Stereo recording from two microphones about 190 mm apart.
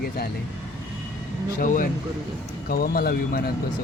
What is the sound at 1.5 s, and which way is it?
Speech, 45° left (ahead or behind).